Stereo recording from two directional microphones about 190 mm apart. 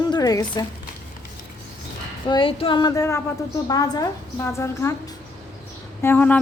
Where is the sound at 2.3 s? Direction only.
25° left (ahead or behind).